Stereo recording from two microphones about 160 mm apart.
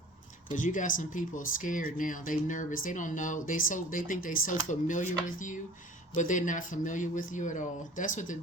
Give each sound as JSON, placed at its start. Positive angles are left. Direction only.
{"t": 0.5, "sound": "speech", "side_deg": 55}